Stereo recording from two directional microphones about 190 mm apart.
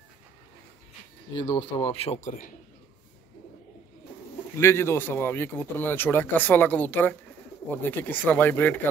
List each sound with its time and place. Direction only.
1.3 s speech: 25° left (ahead or behind); by 2.5 s 40° left (ahead or behind)
4.6 s speech: 15° left (ahead or behind)